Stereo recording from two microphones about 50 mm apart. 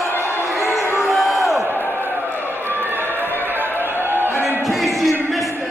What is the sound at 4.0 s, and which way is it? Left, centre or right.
Music, right.